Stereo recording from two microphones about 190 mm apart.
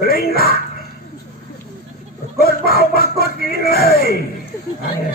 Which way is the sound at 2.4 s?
50° left (ahead or behind).